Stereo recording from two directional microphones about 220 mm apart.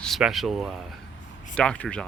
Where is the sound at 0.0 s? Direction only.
Centre (ahead or behind).